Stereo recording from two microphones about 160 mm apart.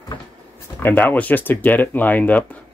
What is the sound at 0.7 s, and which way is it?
Speech, 10° left (ahead or behind).